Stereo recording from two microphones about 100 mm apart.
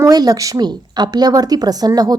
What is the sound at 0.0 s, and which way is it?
Speech, 40° right (ahead or behind).